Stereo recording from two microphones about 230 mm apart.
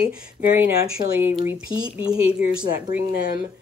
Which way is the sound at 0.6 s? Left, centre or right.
Centre.